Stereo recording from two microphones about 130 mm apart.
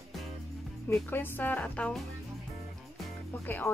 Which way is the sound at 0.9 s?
15° left (ahead or behind).